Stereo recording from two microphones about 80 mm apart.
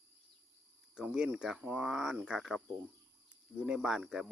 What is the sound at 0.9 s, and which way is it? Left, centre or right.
Speech, centre.